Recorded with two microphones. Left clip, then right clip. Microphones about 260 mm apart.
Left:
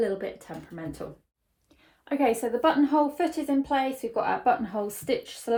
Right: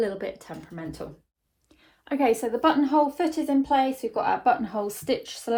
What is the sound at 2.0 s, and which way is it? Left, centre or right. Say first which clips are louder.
Speech: right 2 dB; right.